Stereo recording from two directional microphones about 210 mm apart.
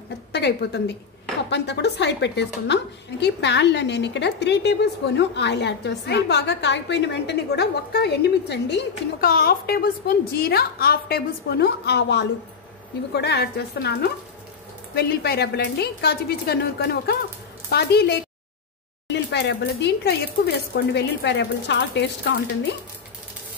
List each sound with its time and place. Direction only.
0.3 s a woman's voice: 55° left (ahead or behind)